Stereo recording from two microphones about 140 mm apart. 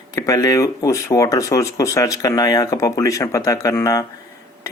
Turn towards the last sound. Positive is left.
turn(degrees=25)  # may be behind; listen again after turning